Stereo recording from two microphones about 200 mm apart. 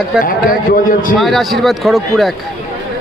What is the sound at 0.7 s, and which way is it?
Speech, 45° left (ahead or behind).